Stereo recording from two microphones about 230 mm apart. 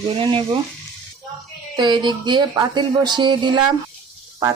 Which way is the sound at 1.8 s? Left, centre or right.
Centre.